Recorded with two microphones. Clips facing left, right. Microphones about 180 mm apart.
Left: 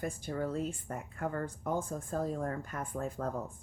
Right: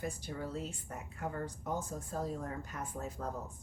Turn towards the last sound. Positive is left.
turn(degrees=55)  # may be behind; listen again after turning